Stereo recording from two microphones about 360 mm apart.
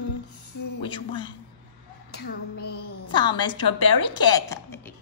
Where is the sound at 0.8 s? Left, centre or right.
Centre.